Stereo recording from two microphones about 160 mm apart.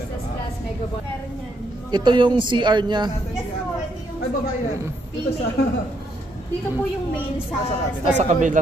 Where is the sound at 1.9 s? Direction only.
30° right (ahead or behind).